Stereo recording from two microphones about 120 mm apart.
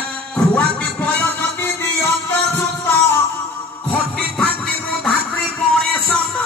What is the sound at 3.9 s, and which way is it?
Music, 10° left (ahead or behind).